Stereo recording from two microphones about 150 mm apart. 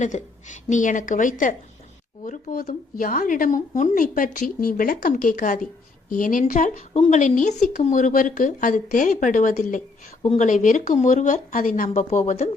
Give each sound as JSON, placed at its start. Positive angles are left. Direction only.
{"t": 0.0, "sound": "speech", "side_deg": 55}